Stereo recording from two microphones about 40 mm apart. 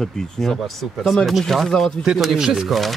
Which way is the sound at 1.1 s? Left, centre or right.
Centre.